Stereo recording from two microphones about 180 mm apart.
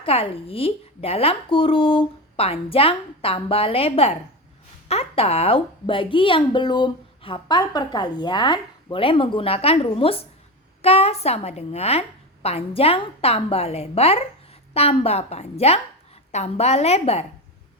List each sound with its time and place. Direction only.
0.0 s a woman's voice: 35° left (ahead or behind)